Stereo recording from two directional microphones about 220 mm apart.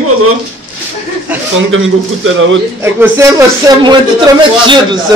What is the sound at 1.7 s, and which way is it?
Speech, 60° right (ahead or behind).